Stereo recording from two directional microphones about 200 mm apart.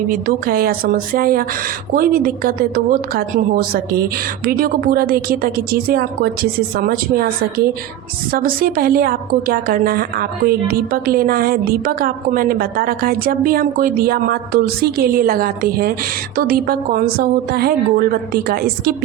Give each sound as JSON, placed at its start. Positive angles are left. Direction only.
{"t": 0.1, "sound": "a woman's voice", "side_deg": -45}
{"t": 8.3, "sound": "a woman's voice", "side_deg": -45}